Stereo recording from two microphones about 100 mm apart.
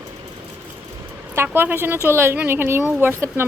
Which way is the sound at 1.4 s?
20° right (ahead or behind).